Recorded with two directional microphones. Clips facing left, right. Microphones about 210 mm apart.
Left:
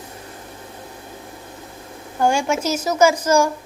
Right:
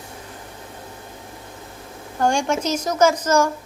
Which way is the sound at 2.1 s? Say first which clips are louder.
Left 1 dB; 5° left (ahead or behind).